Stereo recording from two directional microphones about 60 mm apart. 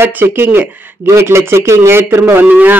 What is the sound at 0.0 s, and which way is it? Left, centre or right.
Speech, right.